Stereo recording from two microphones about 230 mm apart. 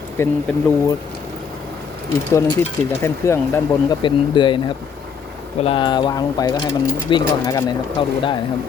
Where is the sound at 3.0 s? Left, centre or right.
Centre.